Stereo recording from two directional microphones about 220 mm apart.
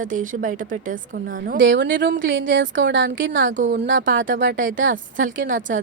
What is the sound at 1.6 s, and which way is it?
A woman's voice, 60° right (ahead or behind).